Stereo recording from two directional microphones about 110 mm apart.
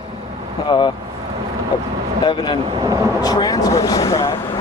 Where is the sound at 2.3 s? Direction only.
40° left (ahead or behind).